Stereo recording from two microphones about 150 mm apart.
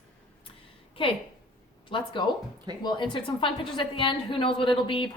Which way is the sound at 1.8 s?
35° left (ahead or behind).